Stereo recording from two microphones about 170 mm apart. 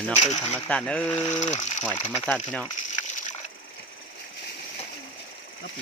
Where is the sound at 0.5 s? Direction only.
5° left (ahead or behind).